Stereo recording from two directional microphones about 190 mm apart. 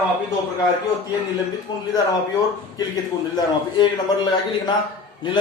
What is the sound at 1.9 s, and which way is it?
A man's voice, 20° left (ahead or behind).